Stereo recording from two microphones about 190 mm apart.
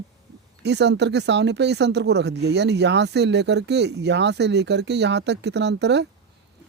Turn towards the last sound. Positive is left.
turn(degrees=-65)  # may be behind; listen again after turning